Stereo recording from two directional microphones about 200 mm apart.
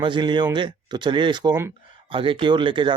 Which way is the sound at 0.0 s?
20° right (ahead or behind).